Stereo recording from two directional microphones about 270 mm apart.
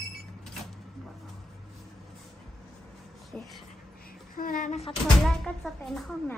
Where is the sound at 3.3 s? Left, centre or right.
Centre.